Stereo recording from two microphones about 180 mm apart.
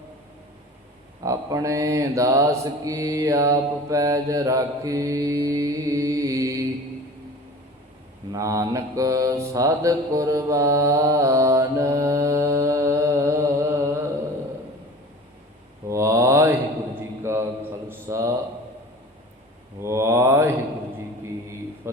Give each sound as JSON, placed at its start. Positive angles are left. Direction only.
{"t": 1.2, "sound": "mantra", "side_deg": -20}
{"t": 8.3, "sound": "mantra", "side_deg": -20}
{"t": 15.9, "sound": "mantra", "side_deg": -15}
{"t": 19.8, "sound": "mantra", "side_deg": -15}